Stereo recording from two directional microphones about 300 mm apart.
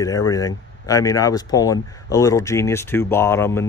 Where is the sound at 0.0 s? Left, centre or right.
Centre.